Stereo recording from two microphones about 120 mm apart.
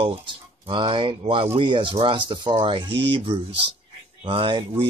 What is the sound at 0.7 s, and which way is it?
Speech, 45° right (ahead or behind).